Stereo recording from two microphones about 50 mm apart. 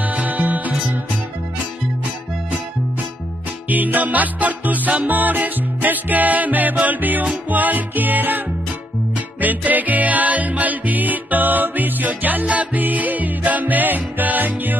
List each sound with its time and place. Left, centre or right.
0.0 s music: right
3.6 s music: right
9.4 s music: right